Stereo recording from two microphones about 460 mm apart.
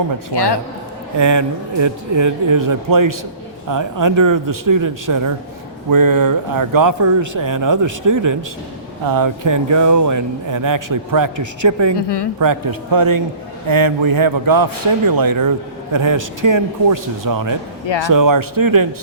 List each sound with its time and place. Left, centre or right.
1.2 s speech: right
11.9 s a woman's voice: left
12.4 s a man's voice: right